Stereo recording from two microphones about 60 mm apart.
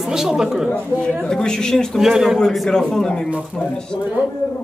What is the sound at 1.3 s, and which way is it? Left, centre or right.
Speech, centre.